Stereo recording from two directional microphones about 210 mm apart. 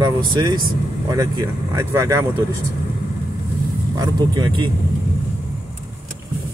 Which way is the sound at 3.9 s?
20° right (ahead or behind).